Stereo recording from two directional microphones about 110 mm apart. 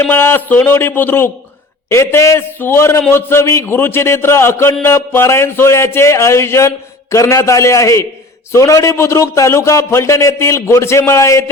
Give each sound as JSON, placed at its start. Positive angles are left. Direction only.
{"t": 0.0, "sound": "a man's voice", "side_deg": 20}